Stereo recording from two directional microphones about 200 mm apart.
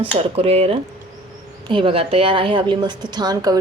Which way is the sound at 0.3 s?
30° right (ahead or behind).